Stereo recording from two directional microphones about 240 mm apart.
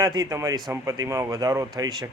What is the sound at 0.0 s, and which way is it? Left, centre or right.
A man's voice, centre.